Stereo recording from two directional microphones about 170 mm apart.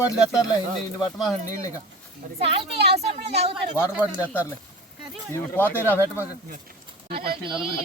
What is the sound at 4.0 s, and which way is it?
Speech, 10° right (ahead or behind).